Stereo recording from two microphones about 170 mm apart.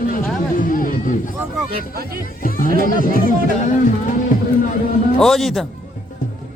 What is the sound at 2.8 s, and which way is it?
Speech, 55° left (ahead or behind).